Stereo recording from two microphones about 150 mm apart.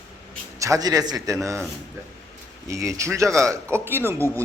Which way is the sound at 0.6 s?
25° right (ahead or behind).